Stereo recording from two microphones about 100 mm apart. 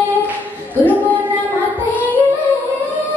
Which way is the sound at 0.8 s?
15° left (ahead or behind).